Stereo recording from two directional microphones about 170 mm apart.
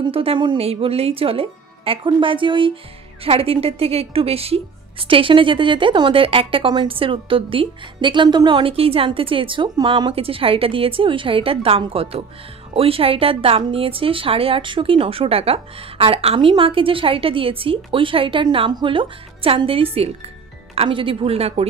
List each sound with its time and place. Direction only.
0.0 s speech: 35° right (ahead or behind)